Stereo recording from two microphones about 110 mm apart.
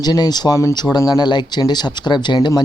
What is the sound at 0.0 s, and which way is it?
Speech, 40° left (ahead or behind).